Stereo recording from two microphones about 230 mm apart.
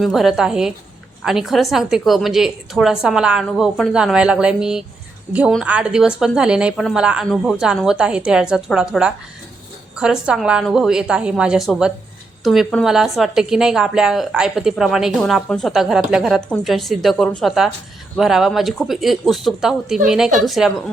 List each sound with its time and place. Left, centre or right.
0.0 s a woman's voice: centre